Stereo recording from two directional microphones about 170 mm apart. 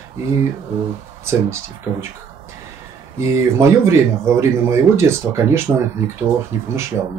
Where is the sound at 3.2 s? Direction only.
15° right (ahead or behind).